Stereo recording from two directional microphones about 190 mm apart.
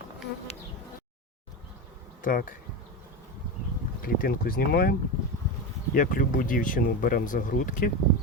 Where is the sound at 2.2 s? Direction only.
45° left (ahead or behind).